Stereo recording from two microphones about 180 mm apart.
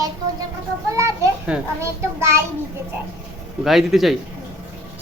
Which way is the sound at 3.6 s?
Centre (ahead or behind).